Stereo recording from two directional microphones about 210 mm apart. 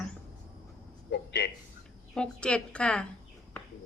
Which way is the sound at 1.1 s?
50° left (ahead or behind).